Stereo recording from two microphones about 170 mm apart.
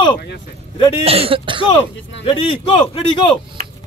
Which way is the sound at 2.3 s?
30° left (ahead or behind).